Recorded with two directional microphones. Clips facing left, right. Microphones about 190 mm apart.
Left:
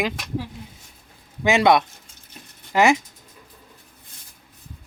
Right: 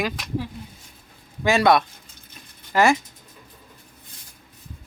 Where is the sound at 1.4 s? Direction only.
20° left (ahead or behind).